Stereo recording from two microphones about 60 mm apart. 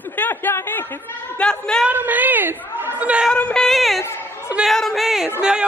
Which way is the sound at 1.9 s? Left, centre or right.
Right.